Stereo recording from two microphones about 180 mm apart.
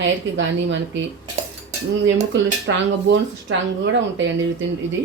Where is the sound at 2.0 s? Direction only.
90° right.